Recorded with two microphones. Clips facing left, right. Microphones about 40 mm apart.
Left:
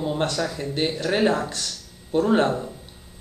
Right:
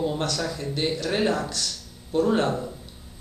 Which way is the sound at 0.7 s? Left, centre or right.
Left.